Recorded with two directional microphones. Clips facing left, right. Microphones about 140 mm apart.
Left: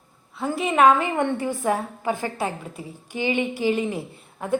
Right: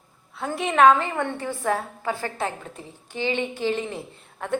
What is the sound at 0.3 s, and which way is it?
A woman's voice, centre (ahead or behind).